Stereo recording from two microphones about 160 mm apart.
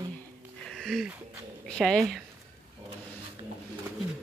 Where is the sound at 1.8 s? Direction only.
Centre (ahead or behind).